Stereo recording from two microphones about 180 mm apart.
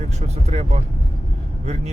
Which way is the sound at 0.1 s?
40° right (ahead or behind).